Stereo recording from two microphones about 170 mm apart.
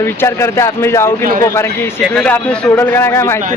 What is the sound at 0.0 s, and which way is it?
Speech, 15° left (ahead or behind).